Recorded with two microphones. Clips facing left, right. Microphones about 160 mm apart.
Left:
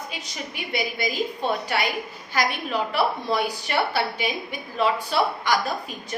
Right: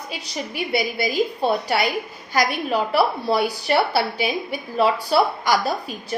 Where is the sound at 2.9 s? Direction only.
35° right (ahead or behind).